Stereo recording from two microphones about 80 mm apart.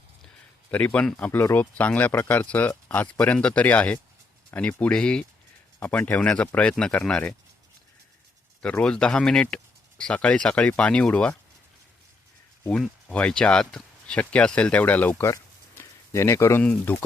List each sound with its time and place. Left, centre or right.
0.7 s speech: centre
8.8 s speech: centre
12.7 s speech: centre
15.8 s speech: left
16.6 s speech: left